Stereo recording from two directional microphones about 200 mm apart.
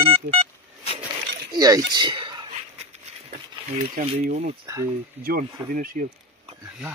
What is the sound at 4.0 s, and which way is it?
Speech, 45° right (ahead or behind).